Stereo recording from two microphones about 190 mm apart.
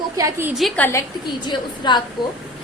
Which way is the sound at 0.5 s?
5° left (ahead or behind).